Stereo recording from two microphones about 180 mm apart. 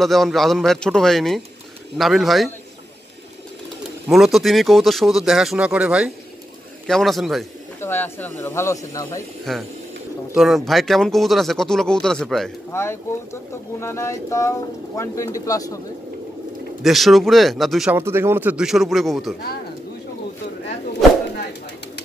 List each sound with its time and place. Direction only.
0.0 s speech: centre (ahead or behind)
4.1 s speech: centre (ahead or behind)
7.8 s speech: 10° left (ahead or behind)
9.4 s speech: centre (ahead or behind)
12.7 s speech: 15° left (ahead or behind)
16.8 s speech: centre (ahead or behind)
17.9 s speech: 15° right (ahead or behind)